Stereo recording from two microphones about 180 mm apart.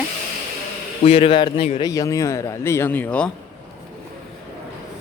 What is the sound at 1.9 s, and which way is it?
A man's voice, 20° left (ahead or behind).